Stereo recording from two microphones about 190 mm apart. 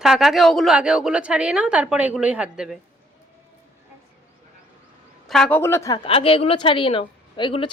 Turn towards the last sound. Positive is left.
turn(degrees=25)  # may be behind; listen again after turning